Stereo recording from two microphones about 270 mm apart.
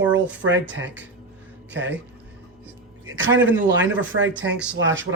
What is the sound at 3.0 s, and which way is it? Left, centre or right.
Speech, right.